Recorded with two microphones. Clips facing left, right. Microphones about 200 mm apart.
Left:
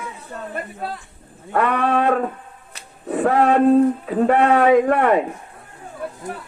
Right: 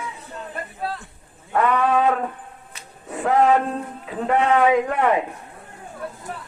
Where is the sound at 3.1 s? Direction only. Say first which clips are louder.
Left 2 dB; 60° left (ahead or behind).